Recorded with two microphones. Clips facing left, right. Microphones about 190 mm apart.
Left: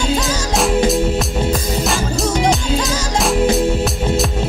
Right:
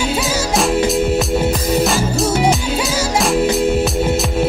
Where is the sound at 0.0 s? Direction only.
10° right (ahead or behind).